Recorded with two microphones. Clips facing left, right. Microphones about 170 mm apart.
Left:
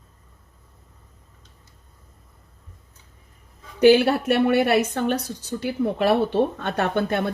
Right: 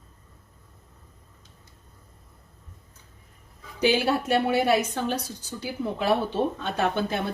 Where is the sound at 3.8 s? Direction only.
60° left (ahead or behind).